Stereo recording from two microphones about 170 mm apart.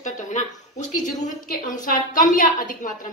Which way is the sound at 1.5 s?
50° left (ahead or behind).